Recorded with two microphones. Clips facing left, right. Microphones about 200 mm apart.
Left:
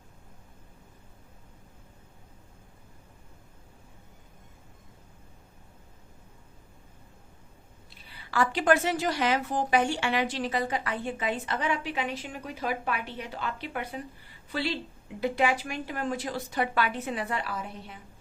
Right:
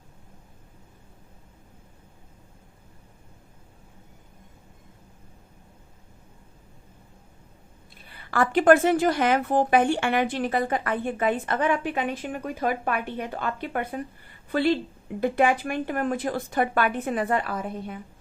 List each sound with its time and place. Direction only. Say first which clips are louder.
8.0 s a woman's voice: right 3 dB; 50° right (ahead or behind)